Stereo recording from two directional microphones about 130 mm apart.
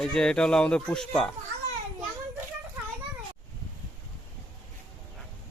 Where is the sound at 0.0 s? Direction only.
5° left (ahead or behind).